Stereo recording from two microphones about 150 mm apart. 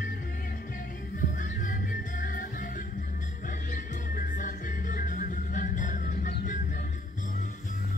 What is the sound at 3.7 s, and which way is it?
Music, 65° left (ahead or behind).